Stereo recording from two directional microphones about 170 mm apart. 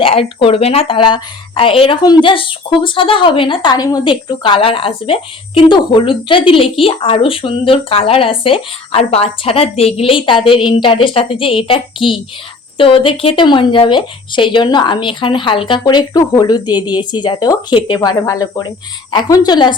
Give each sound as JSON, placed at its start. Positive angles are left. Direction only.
{"t": 0.0, "sound": "a woman's voice", "side_deg": 35}